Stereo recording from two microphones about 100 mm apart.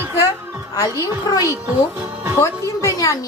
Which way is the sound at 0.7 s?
40° left (ahead or behind).